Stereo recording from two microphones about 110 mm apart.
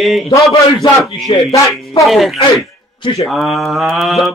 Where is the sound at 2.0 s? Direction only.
Centre (ahead or behind).